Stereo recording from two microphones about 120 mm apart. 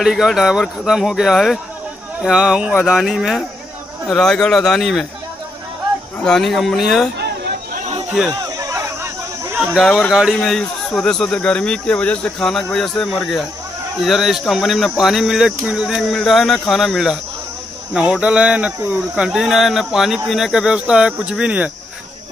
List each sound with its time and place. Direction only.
0.0 s speech: centre (ahead or behind)
6.2 s speech: 5° left (ahead or behind)
8.5 s a sound: 25° right (ahead or behind)
9.6 s speech: centre (ahead or behind)